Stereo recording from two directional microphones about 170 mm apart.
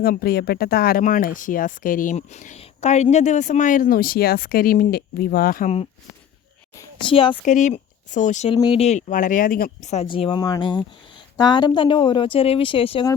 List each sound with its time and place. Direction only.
0.0 s speech: 65° left (ahead or behind)
7.1 s speech: 30° left (ahead or behind)
7.4 s speech: 45° left (ahead or behind)
8.6 s a woman's voice: 35° left (ahead or behind)
10.1 s speech: 30° left (ahead or behind)